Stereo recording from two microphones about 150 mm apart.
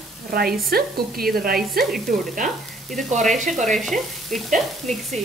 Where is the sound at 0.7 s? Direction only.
80° right.